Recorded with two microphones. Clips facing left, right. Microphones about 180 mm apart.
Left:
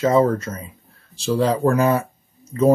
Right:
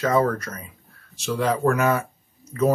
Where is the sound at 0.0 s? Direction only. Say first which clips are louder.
Left 4 dB; 25° left (ahead or behind).